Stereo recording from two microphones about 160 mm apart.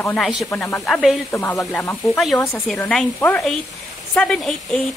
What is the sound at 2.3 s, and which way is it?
Speech, 15° left (ahead or behind).